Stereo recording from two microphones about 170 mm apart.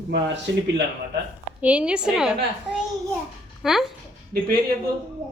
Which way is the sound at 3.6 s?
Centre (ahead or behind).